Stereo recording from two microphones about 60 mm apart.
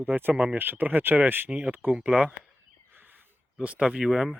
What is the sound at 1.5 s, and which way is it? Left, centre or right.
Speech, centre.